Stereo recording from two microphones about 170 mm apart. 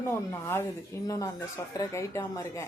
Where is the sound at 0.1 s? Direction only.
15° left (ahead or behind).